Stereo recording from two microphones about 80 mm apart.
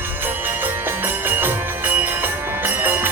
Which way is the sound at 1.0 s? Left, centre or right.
Right.